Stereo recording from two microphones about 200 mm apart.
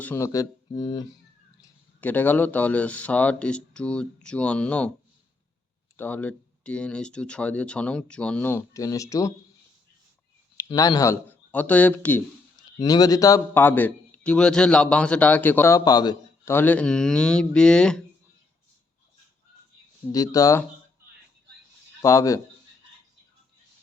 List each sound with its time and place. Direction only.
0.0 s a man's voice: 10° left (ahead or behind)
1.6 s a man's voice: 10° left (ahead or behind)
6.0 s speech: 10° left (ahead or behind)
10.6 s speech: 20° left (ahead or behind)
12.8 s a man's voice: 20° left (ahead or behind)
20.1 s a man's voice: 15° left (ahead or behind)
22.0 s a man's voice: 15° left (ahead or behind)